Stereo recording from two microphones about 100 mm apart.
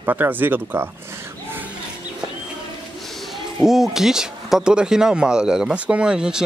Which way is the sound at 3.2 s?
Centre (ahead or behind).